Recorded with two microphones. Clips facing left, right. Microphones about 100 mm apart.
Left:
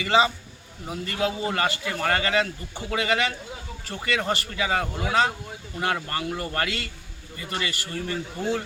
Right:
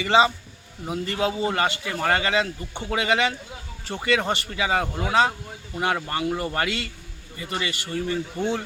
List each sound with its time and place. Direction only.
0.9 s speech: 20° right (ahead or behind)